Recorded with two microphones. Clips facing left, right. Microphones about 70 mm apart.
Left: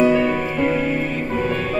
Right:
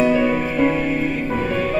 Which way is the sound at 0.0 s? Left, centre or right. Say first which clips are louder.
Even; centre.